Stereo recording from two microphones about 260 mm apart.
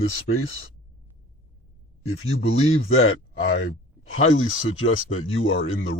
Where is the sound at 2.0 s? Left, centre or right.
Left.